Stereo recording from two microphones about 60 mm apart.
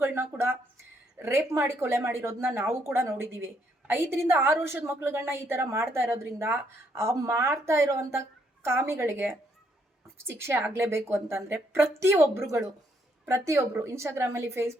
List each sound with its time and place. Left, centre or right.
0.0 s a woman's voice: right
10.2 s a woman's voice: right